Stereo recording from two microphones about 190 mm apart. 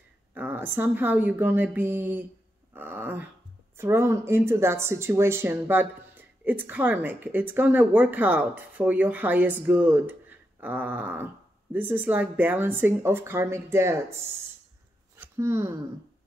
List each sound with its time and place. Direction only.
0.3 s speech: 10° right (ahead or behind)
2.7 s a sound: 10° right (ahead or behind)
3.7 s speech: 15° right (ahead or behind)
15.1 s speech: 15° right (ahead or behind)